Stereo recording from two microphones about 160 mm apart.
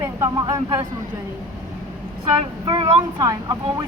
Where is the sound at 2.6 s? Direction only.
35° right (ahead or behind).